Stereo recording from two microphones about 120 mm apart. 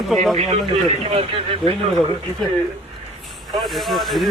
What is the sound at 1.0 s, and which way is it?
Speech, 50° right (ahead or behind).